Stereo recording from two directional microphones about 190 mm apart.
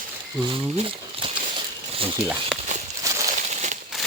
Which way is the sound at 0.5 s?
30° right (ahead or behind).